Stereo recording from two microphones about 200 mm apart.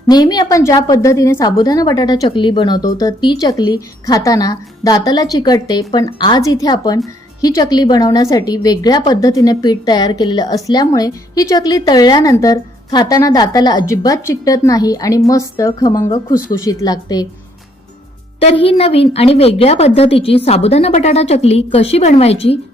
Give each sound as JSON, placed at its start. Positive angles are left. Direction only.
{"t": 0.1, "sound": "a woman's voice", "side_deg": 20}
{"t": 18.3, "sound": "a woman's voice", "side_deg": 30}